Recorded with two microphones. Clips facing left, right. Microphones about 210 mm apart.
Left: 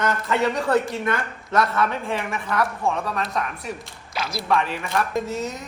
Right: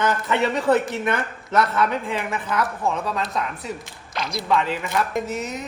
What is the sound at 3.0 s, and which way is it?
Speech, centre (ahead or behind).